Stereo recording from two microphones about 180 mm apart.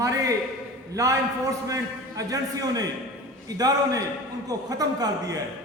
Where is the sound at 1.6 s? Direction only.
20° right (ahead or behind).